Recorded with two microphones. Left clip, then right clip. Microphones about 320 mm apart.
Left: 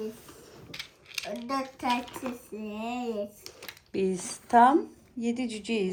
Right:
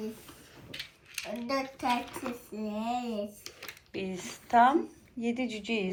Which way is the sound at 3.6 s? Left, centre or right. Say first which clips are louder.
Left 8 dB; centre.